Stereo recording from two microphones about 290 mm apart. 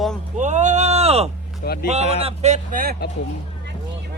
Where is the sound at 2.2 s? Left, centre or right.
Right.